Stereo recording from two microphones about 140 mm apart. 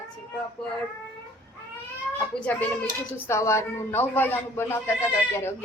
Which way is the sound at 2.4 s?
10° left (ahead or behind).